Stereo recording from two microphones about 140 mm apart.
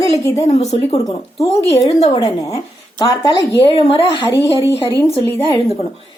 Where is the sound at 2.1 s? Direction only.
25° left (ahead or behind).